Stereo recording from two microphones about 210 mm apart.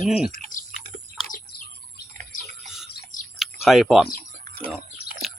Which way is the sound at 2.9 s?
45° left (ahead or behind).